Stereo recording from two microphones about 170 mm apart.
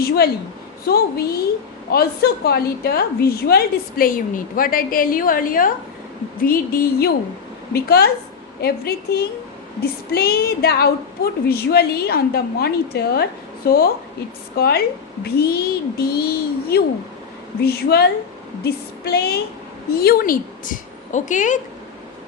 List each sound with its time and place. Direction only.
0.9 s a woman's voice: 65° left (ahead or behind); by 21.6 s 50° left (ahead or behind)